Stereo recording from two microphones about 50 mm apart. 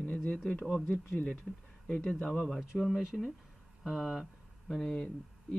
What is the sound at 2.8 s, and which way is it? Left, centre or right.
Speech, centre.